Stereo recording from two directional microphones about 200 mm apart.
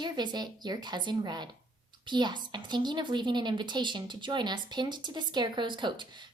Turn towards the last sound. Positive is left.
turn(degrees=-25)  # may be behind; listen again after turning